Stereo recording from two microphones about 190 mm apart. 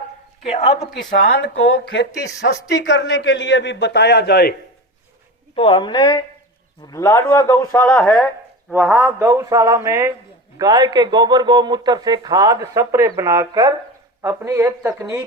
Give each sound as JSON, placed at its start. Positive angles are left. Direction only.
{"t": 0.4, "sound": "a woman's voice", "side_deg": 35}
{"t": 1.1, "sound": "a man's voice", "side_deg": 55}
{"t": 5.5, "sound": "a woman's voice", "side_deg": 25}
{"t": 8.7, "sound": "a man's voice", "side_deg": -10}